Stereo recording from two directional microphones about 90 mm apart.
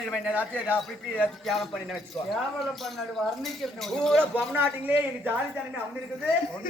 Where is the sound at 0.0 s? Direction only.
10° right (ahead or behind).